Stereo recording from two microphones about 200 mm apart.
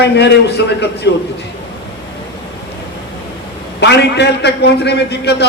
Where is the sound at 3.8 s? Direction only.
55° left (ahead or behind).